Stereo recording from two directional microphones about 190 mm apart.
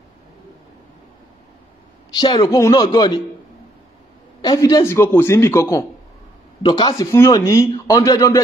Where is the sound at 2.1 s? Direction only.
20° left (ahead or behind).